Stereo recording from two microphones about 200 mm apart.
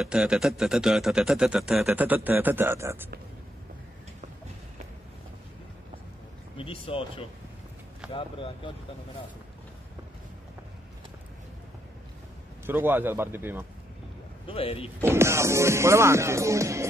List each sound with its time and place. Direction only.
0.0 s speech: 5° right (ahead or behind)
6.5 s speech: 25° left (ahead or behind)
12.6 s speech: 10° right (ahead or behind)
14.5 s speech: 30° left (ahead or behind)
15.0 s speech: 10° right (ahead or behind)